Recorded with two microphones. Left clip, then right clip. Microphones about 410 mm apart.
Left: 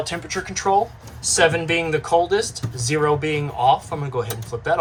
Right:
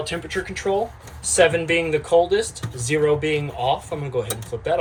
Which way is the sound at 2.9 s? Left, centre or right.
Centre.